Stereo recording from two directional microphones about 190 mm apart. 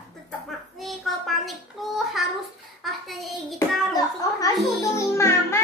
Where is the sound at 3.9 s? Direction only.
20° left (ahead or behind).